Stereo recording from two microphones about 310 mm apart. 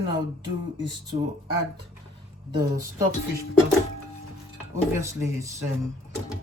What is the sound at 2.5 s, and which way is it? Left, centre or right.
Speech, centre.